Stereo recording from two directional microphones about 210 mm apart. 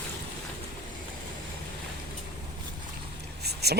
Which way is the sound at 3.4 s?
50° right (ahead or behind).